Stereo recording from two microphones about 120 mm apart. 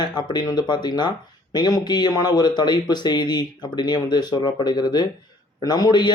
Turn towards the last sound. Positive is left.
turn(degrees=35)  # may be behind; listen again after turning